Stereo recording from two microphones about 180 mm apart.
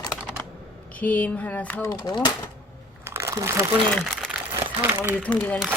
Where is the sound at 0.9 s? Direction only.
10° left (ahead or behind).